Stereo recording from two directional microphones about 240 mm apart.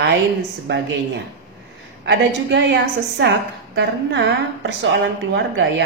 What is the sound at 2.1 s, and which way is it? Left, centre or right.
A woman's voice, right.